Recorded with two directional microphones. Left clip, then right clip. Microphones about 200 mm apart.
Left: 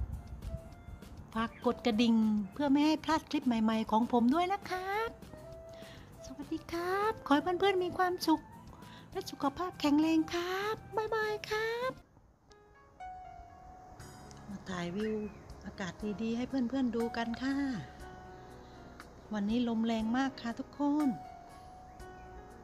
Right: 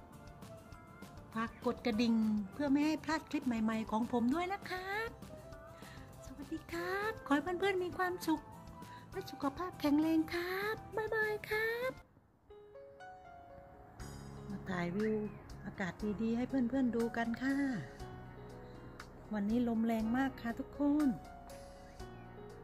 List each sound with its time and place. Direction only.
1.3 s music: 15° left (ahead or behind)
2.5 s speech: 15° left (ahead or behind)
6.5 s speech: 25° left (ahead or behind)
9.1 s music: 15° left (ahead or behind)
14.7 s speech: 15° right (ahead or behind)
19.3 s speech: centre (ahead or behind)